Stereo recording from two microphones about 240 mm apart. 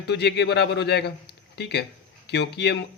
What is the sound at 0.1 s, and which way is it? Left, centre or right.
Speech, left.